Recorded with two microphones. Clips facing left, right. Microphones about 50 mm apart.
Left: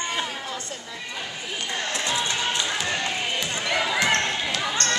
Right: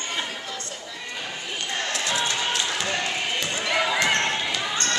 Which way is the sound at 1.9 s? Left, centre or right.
Left.